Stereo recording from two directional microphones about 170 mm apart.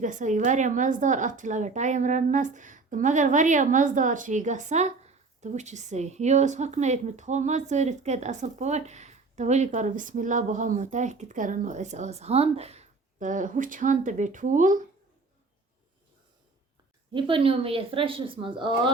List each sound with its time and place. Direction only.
0.0 s speech: 45° right (ahead or behind)
17.1 s speech: 30° right (ahead or behind)